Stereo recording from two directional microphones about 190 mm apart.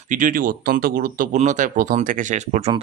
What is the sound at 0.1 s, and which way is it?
Speech, 45° right (ahead or behind).